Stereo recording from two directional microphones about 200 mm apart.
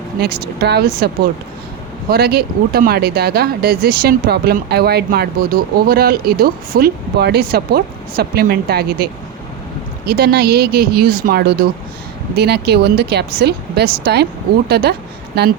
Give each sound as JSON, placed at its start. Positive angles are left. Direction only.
{"t": 0.2, "sound": "speech", "side_deg": -55}
{"t": 10.1, "sound": "speech", "side_deg": -50}